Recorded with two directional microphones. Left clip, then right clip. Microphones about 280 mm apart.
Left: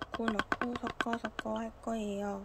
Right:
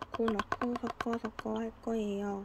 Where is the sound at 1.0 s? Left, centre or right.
Centre.